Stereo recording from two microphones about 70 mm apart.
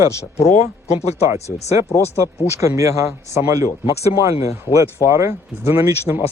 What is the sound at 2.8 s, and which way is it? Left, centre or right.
Speech, right.